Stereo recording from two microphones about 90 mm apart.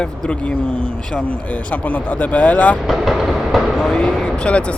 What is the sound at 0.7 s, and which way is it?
Speech, 75° right (ahead or behind).